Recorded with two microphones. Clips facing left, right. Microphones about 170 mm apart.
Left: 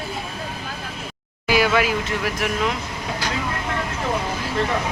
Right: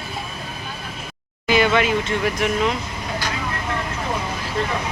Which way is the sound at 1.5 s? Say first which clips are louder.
Right 1 dB; 5° left (ahead or behind).